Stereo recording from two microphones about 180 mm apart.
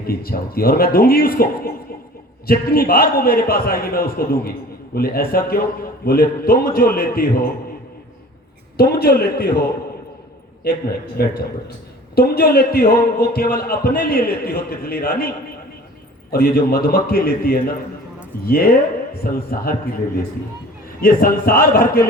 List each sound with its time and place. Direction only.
0.0 s a man's voice: 55° left (ahead or behind)
8.8 s a man's voice: 55° left (ahead or behind)
16.3 s a man's voice: 55° left (ahead or behind)
21.0 s a man's voice: 55° left (ahead or behind)